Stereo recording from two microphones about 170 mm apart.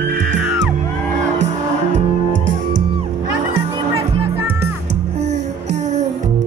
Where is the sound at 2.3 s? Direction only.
90° right.